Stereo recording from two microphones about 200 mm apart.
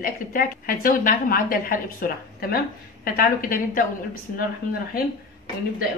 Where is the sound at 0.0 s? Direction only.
45° left (ahead or behind).